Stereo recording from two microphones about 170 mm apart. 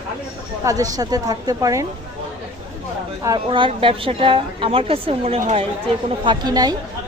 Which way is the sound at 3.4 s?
30° right (ahead or behind).